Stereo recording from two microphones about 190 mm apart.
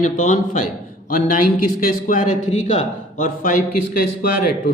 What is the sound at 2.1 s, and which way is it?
Speech, 45° left (ahead or behind).